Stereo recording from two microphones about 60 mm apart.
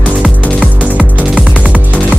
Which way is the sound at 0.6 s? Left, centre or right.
Right.